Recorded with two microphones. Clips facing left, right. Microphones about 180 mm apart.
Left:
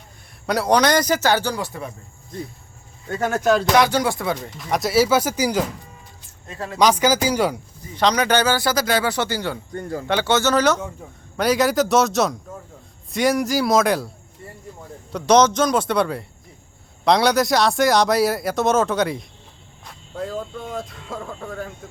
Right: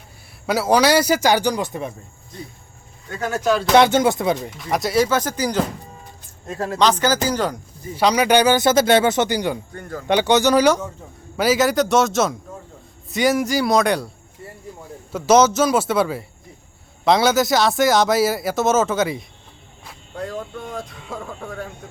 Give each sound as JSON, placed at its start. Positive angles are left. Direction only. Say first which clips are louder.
{"t": 0.4, "sound": "speech", "louder": "right 1 dB", "side_deg": -5}
{"t": 3.8, "sound": "speech", "louder": "right 4 dB", "side_deg": -25}
{"t": 4.5, "sound": "speech", "louder": "left 5 dB", "side_deg": 0}
{"t": 6.5, "sound": "speech", "louder": "right 6 dB", "side_deg": -45}
{"t": 6.7, "sound": "speech", "louder": "left 1 dB", "side_deg": 10}
{"t": 7.9, "sound": "speech", "louder": "right 3 dB", "side_deg": -10}
{"t": 15.1, "sound": "speech", "louder": "right 1 dB", "side_deg": -5}